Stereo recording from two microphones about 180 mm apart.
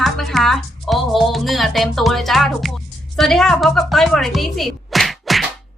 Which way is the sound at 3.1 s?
Centre (ahead or behind).